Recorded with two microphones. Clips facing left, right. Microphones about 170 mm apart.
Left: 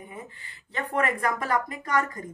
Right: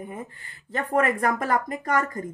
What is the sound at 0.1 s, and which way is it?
A woman's voice, 45° right (ahead or behind).